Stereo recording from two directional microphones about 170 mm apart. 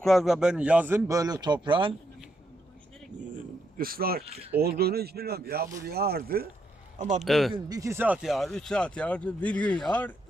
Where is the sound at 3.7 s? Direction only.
60° right (ahead or behind).